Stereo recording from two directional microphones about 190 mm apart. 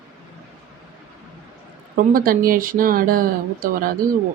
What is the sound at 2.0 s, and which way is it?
Speech, 45° right (ahead or behind).